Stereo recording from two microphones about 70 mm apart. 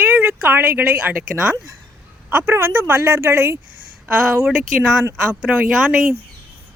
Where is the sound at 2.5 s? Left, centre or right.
Right.